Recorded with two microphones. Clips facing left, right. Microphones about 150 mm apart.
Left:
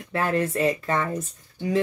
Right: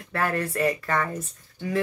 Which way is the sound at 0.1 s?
20° left (ahead or behind).